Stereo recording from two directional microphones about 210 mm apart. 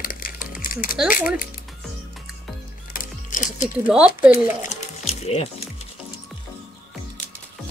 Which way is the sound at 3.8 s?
5° right (ahead or behind).